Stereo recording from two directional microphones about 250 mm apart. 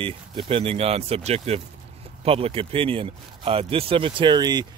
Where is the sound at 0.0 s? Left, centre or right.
Right.